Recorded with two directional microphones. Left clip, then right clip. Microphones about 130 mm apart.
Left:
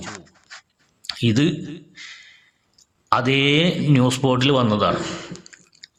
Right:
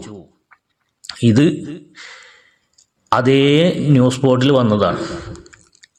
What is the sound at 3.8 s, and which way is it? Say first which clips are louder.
A man's voice: right 4 dB; 25° right (ahead or behind).